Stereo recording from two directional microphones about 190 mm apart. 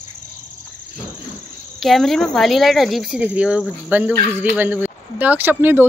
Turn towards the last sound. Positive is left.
turn(degrees=-10)  # may be behind; listen again after turning